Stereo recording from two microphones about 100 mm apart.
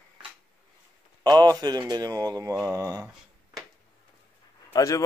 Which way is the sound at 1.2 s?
40° right (ahead or behind).